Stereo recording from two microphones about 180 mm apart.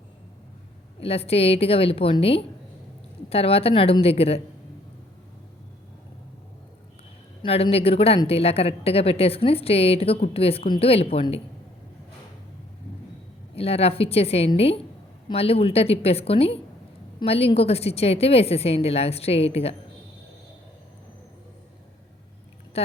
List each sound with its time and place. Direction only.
0.9 s speech: 35° left (ahead or behind)
7.4 s speech: 35° left (ahead or behind)
13.6 s speech: 35° left (ahead or behind)